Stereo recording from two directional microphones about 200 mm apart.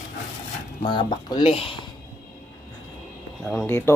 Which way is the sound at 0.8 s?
25° left (ahead or behind).